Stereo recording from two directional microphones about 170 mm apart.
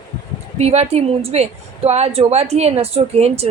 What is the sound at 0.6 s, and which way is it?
A woman's voice, 40° right (ahead or behind).